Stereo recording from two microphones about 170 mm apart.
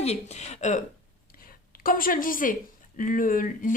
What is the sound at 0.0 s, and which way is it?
Speech, 40° left (ahead or behind).